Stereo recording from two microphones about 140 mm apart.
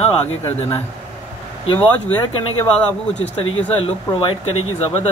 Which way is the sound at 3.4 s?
45° left (ahead or behind).